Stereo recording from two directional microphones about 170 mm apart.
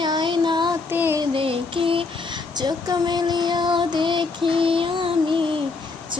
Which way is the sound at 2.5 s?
25° right (ahead or behind).